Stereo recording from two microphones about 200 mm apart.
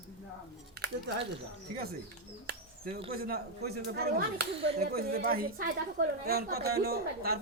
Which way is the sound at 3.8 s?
50° right (ahead or behind).